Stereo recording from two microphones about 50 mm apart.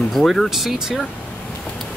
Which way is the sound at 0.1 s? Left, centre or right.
Centre.